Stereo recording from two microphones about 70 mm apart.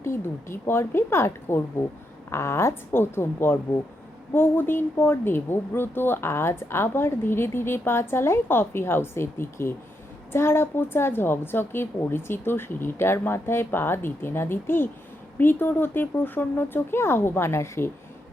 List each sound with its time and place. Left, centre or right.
0.0 s a woman's voice: left